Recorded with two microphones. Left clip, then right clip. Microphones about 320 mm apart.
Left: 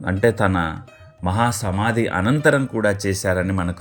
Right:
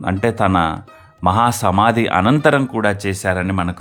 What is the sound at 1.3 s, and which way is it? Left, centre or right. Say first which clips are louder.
Speech: right 6 dB; right.